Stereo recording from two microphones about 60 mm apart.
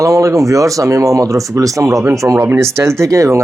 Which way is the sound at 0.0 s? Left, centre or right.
Right.